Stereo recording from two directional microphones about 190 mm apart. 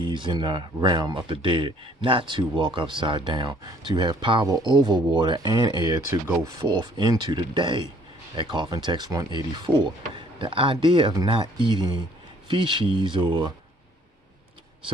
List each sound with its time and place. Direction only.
0.0 s speech: 25° right (ahead or behind)